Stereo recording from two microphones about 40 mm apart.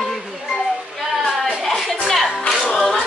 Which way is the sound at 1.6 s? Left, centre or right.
Centre.